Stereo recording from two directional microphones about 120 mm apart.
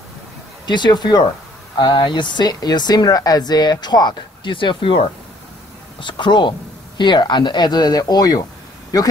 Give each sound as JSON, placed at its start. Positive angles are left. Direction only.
{"t": 0.7, "sound": "speech", "side_deg": 40}